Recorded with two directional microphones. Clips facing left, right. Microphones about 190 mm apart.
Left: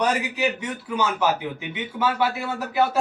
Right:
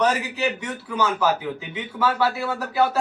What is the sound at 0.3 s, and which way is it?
A man's voice, 15° left (ahead or behind).